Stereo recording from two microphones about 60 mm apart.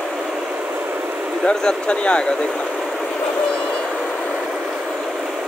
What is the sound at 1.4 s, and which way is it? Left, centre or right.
Speech, centre.